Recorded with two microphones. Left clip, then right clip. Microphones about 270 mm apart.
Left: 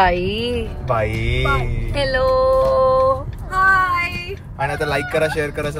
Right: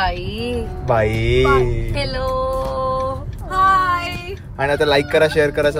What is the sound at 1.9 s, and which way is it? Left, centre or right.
Speech, centre.